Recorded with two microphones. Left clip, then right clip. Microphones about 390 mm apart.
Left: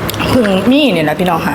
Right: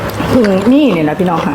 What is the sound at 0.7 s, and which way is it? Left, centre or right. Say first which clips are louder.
Speech: even; left.